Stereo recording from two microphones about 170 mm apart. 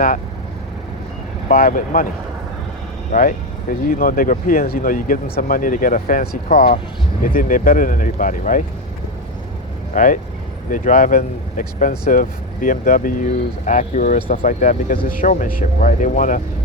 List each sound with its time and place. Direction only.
1.5 s speech: 60° left (ahead or behind)
3.1 s speech: 50° left (ahead or behind)
9.9 s speech: 50° left (ahead or behind)